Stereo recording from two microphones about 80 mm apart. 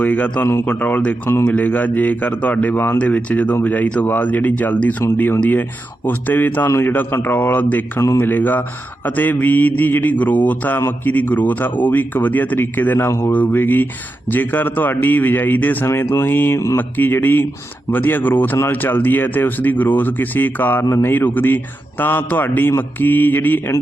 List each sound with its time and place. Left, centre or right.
0.0 s speech: centre; by 13.3 s left
13.3 s speech: left